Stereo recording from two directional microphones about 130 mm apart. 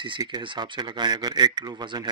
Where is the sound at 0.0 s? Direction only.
35° right (ahead or behind).